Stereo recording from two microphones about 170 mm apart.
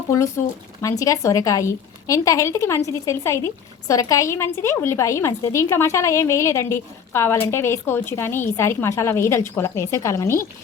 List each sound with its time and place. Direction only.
0.8 s a woman's voice: 20° left (ahead or behind)